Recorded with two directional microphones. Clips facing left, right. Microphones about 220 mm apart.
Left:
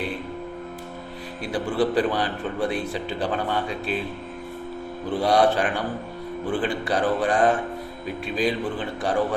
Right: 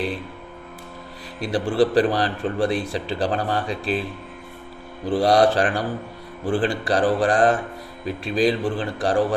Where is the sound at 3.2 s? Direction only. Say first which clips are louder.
Right 1 dB; 35° right (ahead or behind).